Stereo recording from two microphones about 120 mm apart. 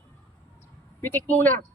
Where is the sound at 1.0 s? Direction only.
15° left (ahead or behind).